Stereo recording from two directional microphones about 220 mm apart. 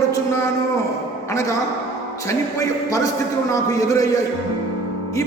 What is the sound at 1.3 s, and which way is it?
A man's voice, 15° left (ahead or behind).